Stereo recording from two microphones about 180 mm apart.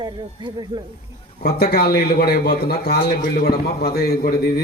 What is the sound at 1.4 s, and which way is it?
A man's voice, 60° left (ahead or behind).